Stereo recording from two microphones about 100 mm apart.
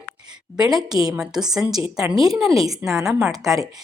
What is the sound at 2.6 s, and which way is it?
Speech, 35° right (ahead or behind).